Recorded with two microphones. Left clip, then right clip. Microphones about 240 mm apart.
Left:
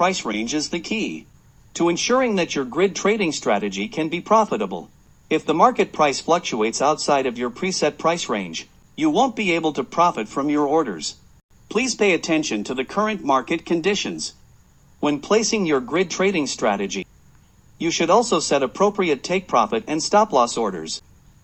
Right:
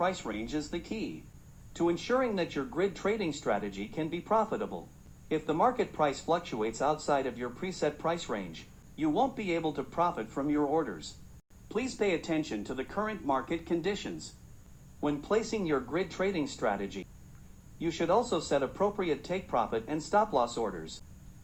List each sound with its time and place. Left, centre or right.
0.0 s speech: left